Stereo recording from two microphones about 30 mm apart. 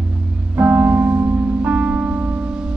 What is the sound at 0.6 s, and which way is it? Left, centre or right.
Music, right.